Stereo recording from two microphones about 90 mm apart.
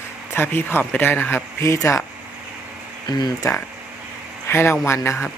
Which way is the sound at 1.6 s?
35° left (ahead or behind).